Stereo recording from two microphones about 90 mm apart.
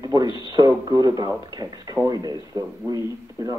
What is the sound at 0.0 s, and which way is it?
Radio, 50° right (ahead or behind).